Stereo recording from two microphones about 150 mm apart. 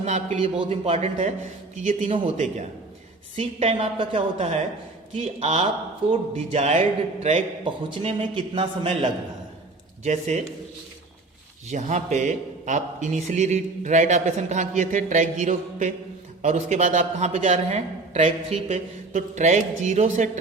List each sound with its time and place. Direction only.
0.0 s a man's voice: 50° right (ahead or behind)
0.6 s a man's voice: 40° right (ahead or behind)
1.8 s a man's voice: 55° right (ahead or behind)
3.3 s a man's voice: 40° right (ahead or behind)
7.6 s a man's voice: 35° right (ahead or behind)
10.0 s a man's voice: 50° right (ahead or behind)
11.7 s a man's voice: 50° right (ahead or behind)